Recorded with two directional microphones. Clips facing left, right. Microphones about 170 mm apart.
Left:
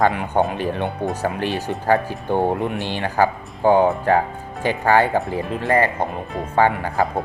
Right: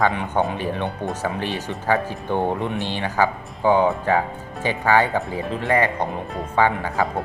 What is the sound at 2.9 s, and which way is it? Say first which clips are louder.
Speech: left 3 dB; 45° left (ahead or behind).